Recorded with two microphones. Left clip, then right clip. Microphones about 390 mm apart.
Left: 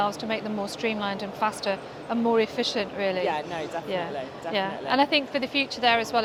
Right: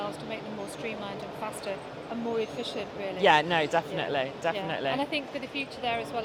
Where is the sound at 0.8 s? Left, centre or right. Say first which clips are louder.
Left 8 dB; left.